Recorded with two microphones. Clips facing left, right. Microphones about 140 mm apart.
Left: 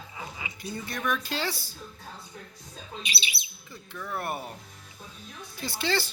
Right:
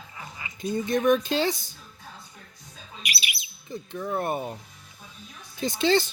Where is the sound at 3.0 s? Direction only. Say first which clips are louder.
Right 4 dB; 25° left (ahead or behind).